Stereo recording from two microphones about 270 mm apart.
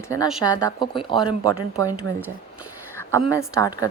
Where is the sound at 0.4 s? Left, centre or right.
Centre.